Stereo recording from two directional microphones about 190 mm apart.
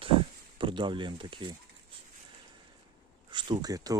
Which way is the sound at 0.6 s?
25° right (ahead or behind).